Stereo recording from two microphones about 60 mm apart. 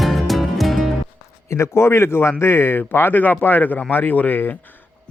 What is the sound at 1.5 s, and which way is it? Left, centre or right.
A man's voice, left.